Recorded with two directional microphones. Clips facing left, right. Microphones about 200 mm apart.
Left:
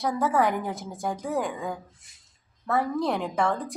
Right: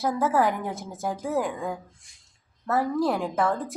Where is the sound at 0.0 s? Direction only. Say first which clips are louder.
Right 1 dB; centre (ahead or behind).